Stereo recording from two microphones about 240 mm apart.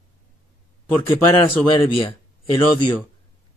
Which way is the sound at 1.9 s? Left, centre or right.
Left.